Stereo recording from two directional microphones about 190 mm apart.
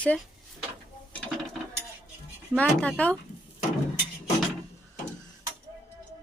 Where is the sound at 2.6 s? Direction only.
5° left (ahead or behind).